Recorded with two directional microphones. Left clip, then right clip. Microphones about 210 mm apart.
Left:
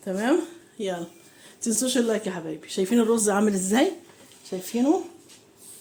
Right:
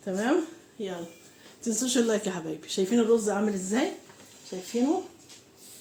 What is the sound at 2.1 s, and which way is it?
Speech, 10° left (ahead or behind).